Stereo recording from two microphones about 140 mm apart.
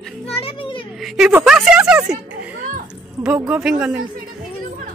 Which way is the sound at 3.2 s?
5° right (ahead or behind).